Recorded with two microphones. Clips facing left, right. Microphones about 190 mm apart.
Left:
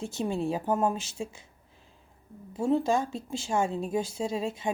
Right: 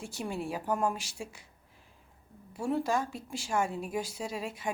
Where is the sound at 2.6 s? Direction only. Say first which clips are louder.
Left 5 dB; 25° left (ahead or behind).